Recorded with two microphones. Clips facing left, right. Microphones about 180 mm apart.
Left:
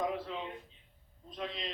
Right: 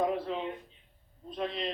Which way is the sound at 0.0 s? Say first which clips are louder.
Right 5 dB; 50° right (ahead or behind).